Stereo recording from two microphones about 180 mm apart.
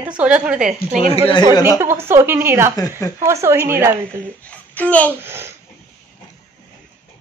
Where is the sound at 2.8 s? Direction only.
15° left (ahead or behind).